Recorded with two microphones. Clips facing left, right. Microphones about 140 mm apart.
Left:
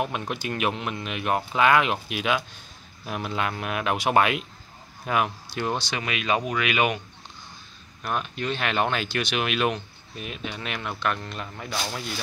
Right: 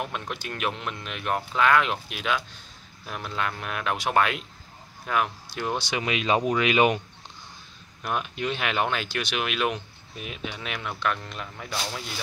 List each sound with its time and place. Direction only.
0.0 s speech: 10° left (ahead or behind)
5.5 s speech: centre (ahead or behind)
5.8 s speech: 15° right (ahead or behind)
8.0 s speech: 10° right (ahead or behind)